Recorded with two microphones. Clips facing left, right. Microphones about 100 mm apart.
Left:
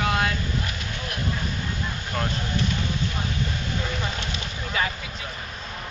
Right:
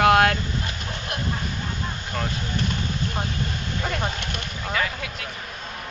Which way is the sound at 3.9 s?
55° right (ahead or behind).